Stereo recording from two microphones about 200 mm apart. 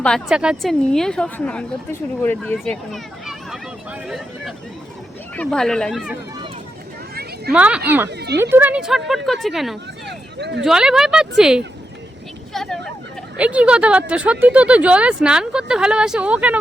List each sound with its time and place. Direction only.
0.0 s a woman's voice: centre (ahead or behind)
7.5 s a woman's voice: 5° right (ahead or behind)
8.1 s speech: 55° right (ahead or behind)
8.4 s a woman's voice: 10° right (ahead or behind)
10.1 s a sound: 60° right (ahead or behind)
10.6 s a woman's voice: centre (ahead or behind)
12.5 s a sound: 5° left (ahead or behind)
13.3 s a woman's voice: 5° right (ahead or behind)